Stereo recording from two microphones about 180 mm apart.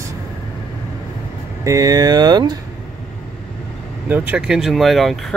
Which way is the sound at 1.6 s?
20° right (ahead or behind).